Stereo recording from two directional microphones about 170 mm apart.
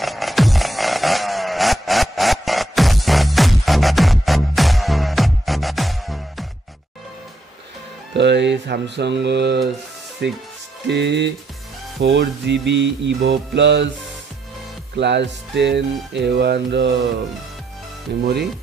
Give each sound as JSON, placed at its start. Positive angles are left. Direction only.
{"t": 0.0, "sound": "music", "side_deg": 0}
{"t": 8.1, "sound": "music", "side_deg": -90}
{"t": 10.2, "sound": "speech", "side_deg": -85}
{"t": 10.9, "sound": "music", "side_deg": -90}
{"t": 15.0, "sound": "music", "side_deg": -90}
{"t": 18.2, "sound": "speech", "side_deg": -70}